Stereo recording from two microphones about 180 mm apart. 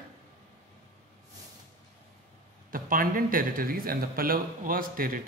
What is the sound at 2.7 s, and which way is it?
Speech, 50° right (ahead or behind).